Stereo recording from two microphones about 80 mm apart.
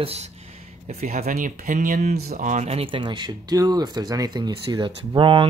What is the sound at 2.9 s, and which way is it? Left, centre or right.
Speech, right.